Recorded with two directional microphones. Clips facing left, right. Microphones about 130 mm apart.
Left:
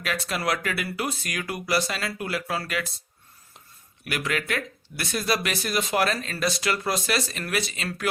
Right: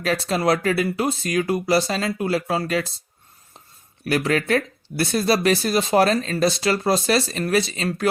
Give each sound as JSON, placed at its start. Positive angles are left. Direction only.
{"t": 0.0, "sound": "speech", "side_deg": -35}
{"t": 4.0, "sound": "speech", "side_deg": -35}